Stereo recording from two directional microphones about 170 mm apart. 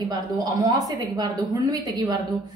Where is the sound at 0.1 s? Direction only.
20° right (ahead or behind).